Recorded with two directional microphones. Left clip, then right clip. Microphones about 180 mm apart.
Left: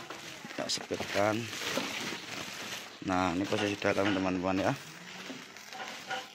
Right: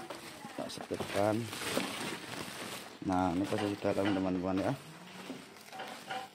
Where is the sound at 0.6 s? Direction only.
5° left (ahead or behind).